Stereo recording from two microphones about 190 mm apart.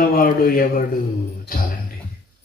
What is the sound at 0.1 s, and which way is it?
A man's voice, 50° left (ahead or behind).